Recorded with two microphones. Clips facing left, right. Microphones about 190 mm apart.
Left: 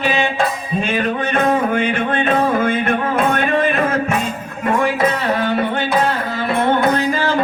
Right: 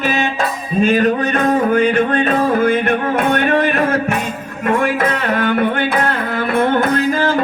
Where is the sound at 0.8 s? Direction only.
40° right (ahead or behind).